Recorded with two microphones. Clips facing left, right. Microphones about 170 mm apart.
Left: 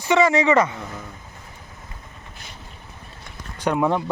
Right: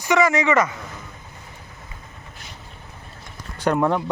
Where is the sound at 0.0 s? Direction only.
30° left (ahead or behind).